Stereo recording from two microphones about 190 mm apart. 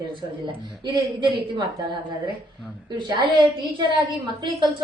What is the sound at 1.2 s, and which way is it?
Speech, 25° right (ahead or behind).